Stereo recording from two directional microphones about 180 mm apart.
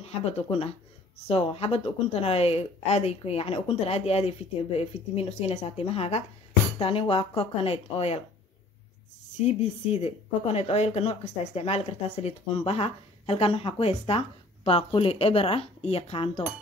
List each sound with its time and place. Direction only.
0.0 s speech: 35° left (ahead or behind)
9.4 s speech: 40° left (ahead or behind)